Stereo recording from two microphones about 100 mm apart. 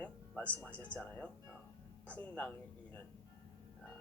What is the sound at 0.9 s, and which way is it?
Speech, 15° left (ahead or behind).